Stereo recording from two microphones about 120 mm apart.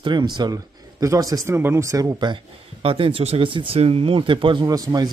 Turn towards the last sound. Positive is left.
turn(degrees=-30)  # may be behind; listen again after turning